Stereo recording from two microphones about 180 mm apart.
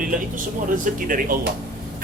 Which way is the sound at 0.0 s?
50° right (ahead or behind).